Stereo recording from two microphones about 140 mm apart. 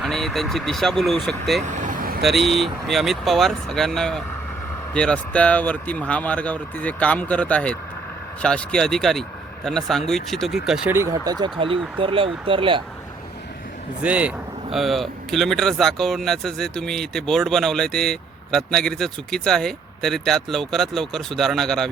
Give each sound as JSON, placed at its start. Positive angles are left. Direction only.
{"t": 0.0, "sound": "speech", "side_deg": 0}
{"t": 1.6, "sound": "vehicle", "side_deg": -60}
{"t": 2.2, "sound": "speech", "side_deg": 0}
{"t": 10.8, "sound": "speech", "side_deg": -20}
{"t": 11.3, "sound": "speech", "side_deg": -35}
{"t": 14.0, "sound": "speech", "side_deg": -10}